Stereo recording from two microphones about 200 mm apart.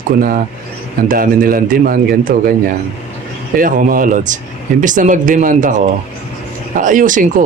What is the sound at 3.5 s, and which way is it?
Speech, 45° right (ahead or behind).